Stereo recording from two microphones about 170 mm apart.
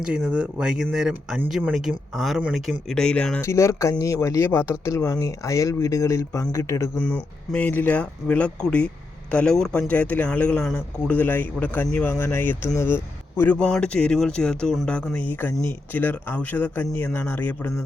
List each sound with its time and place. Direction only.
0.0 s speech: 5° right (ahead or behind); by 17.5 s 10° left (ahead or behind)